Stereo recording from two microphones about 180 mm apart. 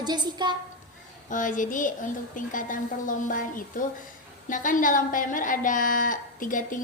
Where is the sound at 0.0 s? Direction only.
25° right (ahead or behind).